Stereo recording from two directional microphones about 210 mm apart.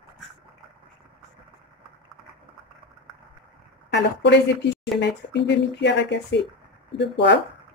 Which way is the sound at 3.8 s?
55° left (ahead or behind).